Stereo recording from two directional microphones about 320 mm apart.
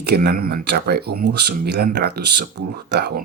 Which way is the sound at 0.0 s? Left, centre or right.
Right.